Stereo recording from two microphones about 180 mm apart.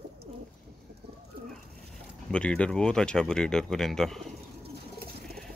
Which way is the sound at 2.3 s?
5° left (ahead or behind).